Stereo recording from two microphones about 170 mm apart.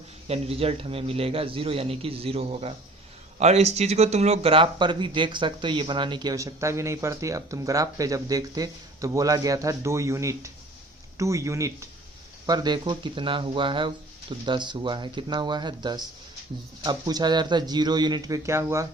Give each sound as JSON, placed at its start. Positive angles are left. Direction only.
{"t": 0.3, "sound": "a man's voice", "side_deg": -35}